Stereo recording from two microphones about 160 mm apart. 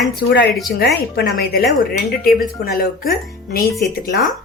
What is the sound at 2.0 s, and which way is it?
Speech, 65° left (ahead or behind).